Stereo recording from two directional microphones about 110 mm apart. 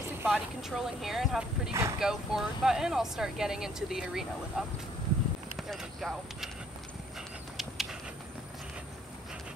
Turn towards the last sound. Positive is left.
turn(degrees=-5)  # may be behind; listen again after turning